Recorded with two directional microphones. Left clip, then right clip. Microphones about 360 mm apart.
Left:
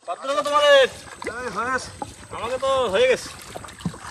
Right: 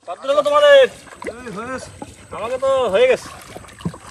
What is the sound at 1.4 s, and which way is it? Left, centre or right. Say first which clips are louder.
Speech: left 7 dB; centre.